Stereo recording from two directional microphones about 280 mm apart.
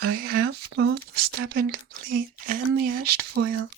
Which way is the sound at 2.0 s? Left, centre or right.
Right.